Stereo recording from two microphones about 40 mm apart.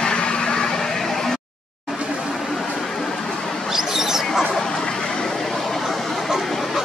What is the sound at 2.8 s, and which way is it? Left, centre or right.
Mouse, centre.